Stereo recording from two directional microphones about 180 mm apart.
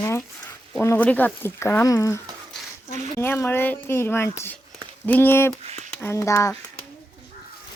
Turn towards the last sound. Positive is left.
turn(degrees=15)  # may be behind; listen again after turning